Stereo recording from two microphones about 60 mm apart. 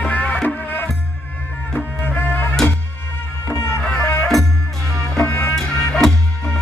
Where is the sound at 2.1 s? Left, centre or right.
Left.